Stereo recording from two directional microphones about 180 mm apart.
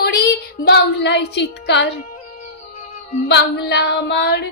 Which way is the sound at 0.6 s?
70° left (ahead or behind).